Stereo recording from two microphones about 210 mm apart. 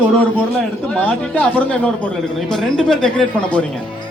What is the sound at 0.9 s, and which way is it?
A man's voice, 5° left (ahead or behind).